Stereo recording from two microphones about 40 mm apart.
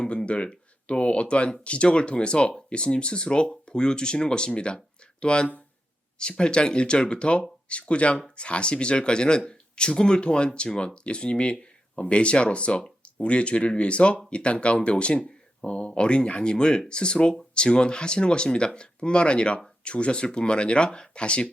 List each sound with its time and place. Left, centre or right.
0.0 s speech: left